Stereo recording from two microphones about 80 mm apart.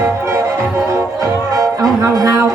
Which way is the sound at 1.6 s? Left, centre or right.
Right.